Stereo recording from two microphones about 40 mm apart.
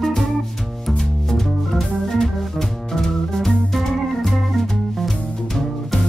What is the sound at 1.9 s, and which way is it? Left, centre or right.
Organ, centre.